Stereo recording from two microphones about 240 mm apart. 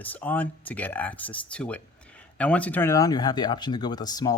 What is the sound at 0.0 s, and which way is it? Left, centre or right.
Speech, centre.